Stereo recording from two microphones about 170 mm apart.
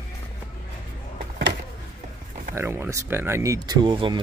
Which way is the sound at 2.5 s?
15° right (ahead or behind).